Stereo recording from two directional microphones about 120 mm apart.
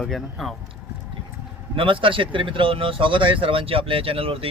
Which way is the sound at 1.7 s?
45° right (ahead or behind).